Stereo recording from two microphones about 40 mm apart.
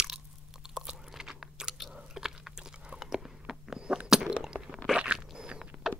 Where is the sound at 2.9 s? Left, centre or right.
Centre.